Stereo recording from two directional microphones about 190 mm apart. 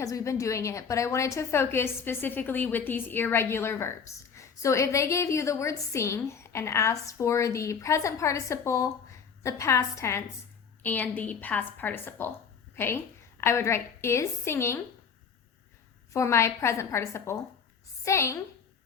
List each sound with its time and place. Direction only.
0.0 s a woman's voice: 15° left (ahead or behind)
16.1 s a woman's voice: 15° left (ahead or behind)